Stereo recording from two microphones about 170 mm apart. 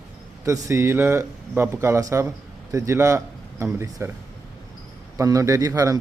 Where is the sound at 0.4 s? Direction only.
20° right (ahead or behind).